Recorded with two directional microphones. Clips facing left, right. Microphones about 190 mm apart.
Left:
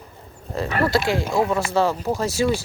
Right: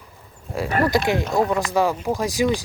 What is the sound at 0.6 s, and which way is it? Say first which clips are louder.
Speech: right 1 dB; 15° right (ahead or behind).